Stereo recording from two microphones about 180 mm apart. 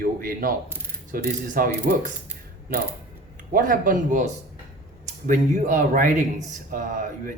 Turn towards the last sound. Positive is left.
turn(degrees=-45)  # may be behind; listen again after turning